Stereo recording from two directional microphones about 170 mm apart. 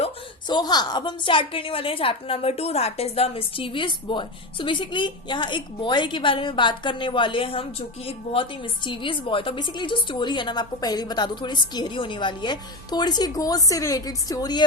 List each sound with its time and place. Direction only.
0.0 s a woman's voice: 25° left (ahead or behind)